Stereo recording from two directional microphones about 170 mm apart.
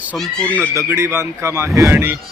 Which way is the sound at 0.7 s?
15° right (ahead or behind).